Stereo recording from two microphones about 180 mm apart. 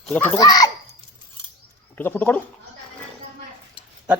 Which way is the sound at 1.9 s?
10° left (ahead or behind).